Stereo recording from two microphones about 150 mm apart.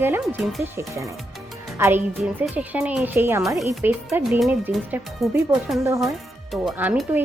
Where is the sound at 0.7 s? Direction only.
20° right (ahead or behind); by 5.3 s centre (ahead or behind).